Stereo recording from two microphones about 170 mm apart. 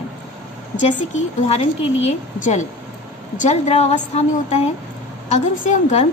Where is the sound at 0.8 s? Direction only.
40° left (ahead or behind).